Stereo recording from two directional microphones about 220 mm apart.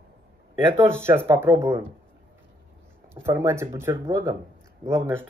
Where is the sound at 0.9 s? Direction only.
10° right (ahead or behind).